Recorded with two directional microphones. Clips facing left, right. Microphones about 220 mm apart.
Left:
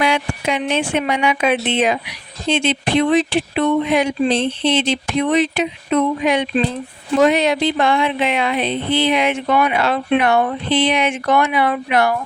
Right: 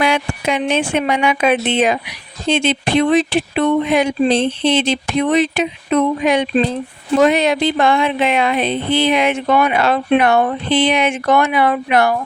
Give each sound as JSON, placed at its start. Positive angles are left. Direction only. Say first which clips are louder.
{"t": 0.0, "sound": "speech", "louder": "right 1 dB", "side_deg": -50}